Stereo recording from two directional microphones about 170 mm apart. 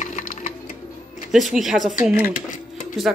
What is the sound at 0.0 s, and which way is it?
Music, 50° left (ahead or behind).